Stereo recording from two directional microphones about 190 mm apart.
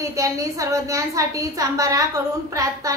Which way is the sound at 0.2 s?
15° right (ahead or behind).